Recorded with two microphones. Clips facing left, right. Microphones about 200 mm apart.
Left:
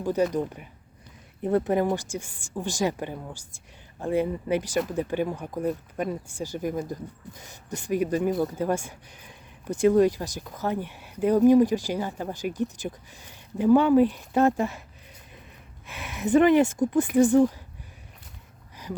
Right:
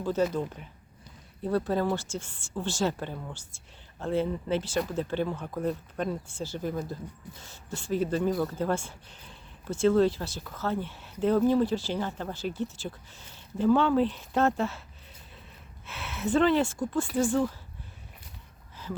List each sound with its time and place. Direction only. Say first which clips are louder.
0.0 s speech: left 3 dB; 15° left (ahead or behind)
15.9 s speech: left 5 dB; 15° left (ahead or behind)